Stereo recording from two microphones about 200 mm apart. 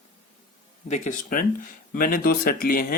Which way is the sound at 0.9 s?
40° left (ahead or behind).